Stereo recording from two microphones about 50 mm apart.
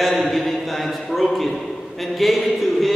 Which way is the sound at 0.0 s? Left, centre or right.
Centre.